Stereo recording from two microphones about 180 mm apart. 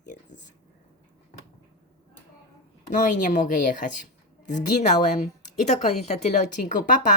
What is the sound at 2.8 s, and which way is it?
A woman's voice, 45° left (ahead or behind).